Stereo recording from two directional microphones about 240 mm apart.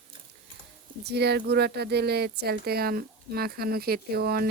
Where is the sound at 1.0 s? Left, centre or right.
Right.